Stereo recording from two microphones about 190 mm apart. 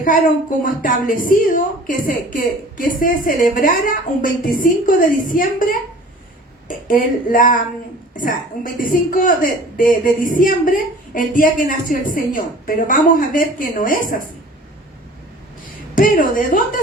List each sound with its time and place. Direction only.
0.6 s a woman's voice: 45° left (ahead or behind)
16.0 s a woman's voice: 45° left (ahead or behind)